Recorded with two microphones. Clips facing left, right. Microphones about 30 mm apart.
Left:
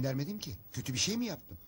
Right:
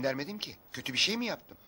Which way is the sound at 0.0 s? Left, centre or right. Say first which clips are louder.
Right 3 dB; right.